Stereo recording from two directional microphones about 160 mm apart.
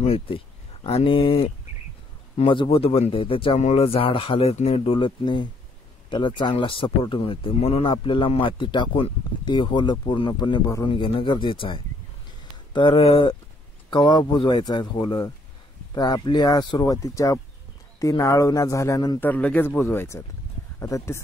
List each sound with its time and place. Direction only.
0.0 s speech: 40° left (ahead or behind); by 19.1 s 20° left (ahead or behind)
19.1 s speech: 10° left (ahead or behind)